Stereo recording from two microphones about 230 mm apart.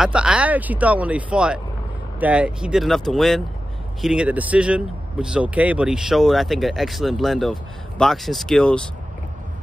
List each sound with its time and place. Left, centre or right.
0.0 s speech: centre